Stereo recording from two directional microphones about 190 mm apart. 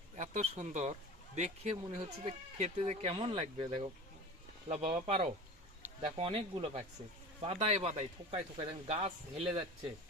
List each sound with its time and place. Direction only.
0.2 s speech: 35° right (ahead or behind)